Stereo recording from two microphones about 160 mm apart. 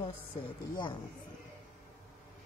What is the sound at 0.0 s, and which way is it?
Speech, 30° left (ahead or behind).